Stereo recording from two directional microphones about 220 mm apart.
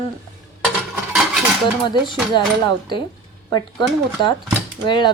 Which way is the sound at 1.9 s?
20° left (ahead or behind).